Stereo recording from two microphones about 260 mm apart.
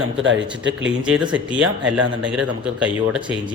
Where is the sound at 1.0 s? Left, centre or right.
Centre.